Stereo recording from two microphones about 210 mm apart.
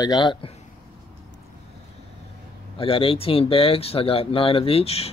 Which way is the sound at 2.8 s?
25° left (ahead or behind).